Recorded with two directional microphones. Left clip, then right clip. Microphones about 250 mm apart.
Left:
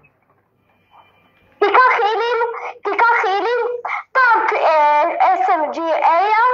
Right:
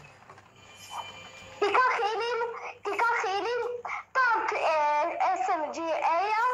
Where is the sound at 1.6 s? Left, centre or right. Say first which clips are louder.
Left 12 dB; left.